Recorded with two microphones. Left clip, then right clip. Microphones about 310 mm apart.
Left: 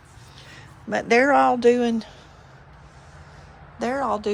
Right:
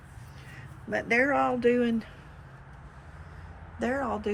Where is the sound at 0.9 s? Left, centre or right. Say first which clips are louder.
Left 7 dB; centre.